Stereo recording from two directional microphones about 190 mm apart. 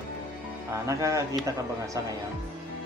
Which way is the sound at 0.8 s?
15° right (ahead or behind).